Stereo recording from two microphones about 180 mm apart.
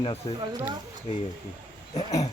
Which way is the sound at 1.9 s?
35° left (ahead or behind).